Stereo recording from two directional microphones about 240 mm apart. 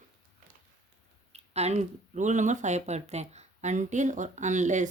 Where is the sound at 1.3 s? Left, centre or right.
Right.